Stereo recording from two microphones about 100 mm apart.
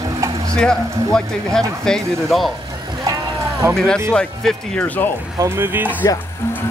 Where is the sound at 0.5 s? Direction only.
5° left (ahead or behind).